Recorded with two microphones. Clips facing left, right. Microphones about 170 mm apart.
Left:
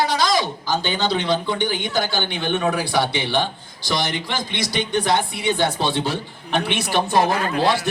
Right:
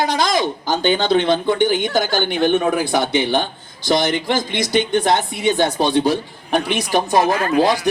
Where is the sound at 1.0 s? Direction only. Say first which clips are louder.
Right 5 dB; 50° right (ahead or behind).